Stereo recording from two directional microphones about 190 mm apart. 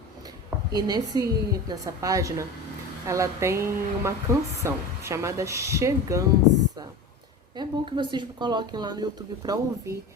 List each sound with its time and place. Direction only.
0.7 s a woman's voice: 20° right (ahead or behind)
7.5 s a woman's voice: 25° right (ahead or behind)